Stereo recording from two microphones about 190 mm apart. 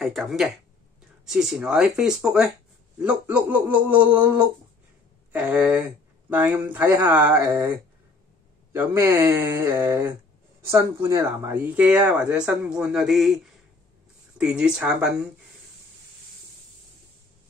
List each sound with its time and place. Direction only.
0.0 s speech: centre (ahead or behind)
8.7 s speech: 15° right (ahead or behind)
14.4 s speech: 5° right (ahead or behind)